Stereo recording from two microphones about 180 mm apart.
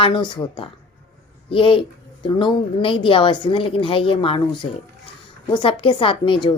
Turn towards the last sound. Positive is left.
turn(degrees=30)  # may be behind; listen again after turning